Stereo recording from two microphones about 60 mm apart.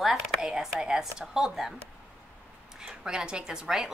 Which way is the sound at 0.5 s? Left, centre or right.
Centre.